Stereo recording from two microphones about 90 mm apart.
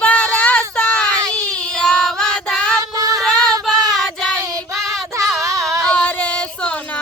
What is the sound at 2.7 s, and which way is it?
Female singing, 45° right (ahead or behind).